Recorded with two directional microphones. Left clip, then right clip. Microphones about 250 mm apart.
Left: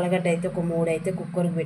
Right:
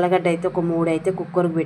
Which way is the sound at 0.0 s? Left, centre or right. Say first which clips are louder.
Right 5 dB; centre.